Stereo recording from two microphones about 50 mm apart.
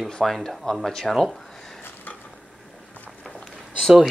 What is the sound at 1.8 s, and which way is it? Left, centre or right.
Mechanisms, left.